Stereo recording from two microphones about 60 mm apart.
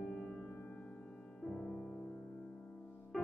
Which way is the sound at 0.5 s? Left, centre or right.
Left.